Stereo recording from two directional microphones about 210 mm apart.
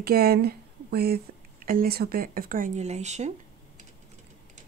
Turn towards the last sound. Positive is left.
turn(degrees=-30)  # may be behind; listen again after turning